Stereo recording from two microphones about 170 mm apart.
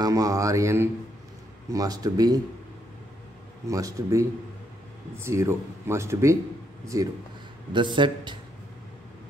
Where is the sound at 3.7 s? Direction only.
20° right (ahead or behind).